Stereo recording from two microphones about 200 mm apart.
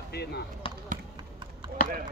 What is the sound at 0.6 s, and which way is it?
Basketball bounce, 25° left (ahead or behind).